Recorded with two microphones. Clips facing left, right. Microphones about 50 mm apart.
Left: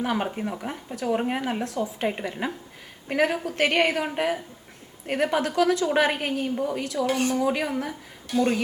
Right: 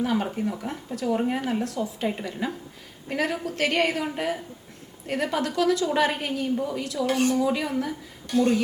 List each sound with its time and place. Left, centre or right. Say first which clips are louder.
0.0 s speech: right 1 dB; left
7.1 s speech: right 3 dB; centre
7.3 s speech: even; left
8.3 s speech: right 1 dB; centre